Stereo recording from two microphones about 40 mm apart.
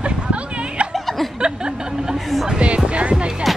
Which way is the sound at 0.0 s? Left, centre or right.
Right.